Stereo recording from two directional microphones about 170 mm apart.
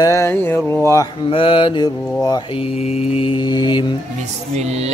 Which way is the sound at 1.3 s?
30° left (ahead or behind).